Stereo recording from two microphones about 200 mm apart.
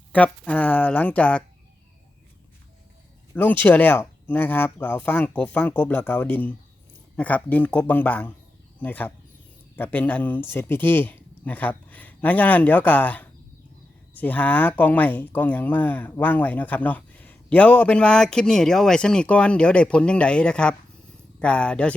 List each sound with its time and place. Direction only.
0.1 s speech: 5° left (ahead or behind)
3.3 s speech: 10° left (ahead or behind)